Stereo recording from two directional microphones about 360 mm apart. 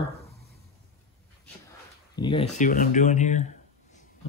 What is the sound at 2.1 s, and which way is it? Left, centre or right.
Speech, centre.